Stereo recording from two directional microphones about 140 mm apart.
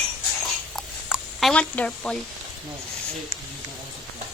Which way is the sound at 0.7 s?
Centre (ahead or behind).